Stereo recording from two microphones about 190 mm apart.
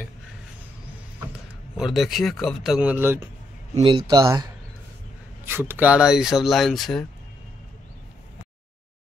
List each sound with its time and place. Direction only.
1.8 s speech: centre (ahead or behind)
3.8 s speech: 20° right (ahead or behind); by 7.1 s centre (ahead or behind)